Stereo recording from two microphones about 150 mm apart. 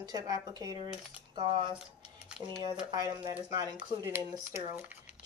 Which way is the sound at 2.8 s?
25° right (ahead or behind).